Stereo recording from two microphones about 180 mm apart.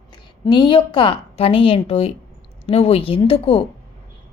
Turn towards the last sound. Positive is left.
turn(degrees=30)  # may be behind; listen again after turning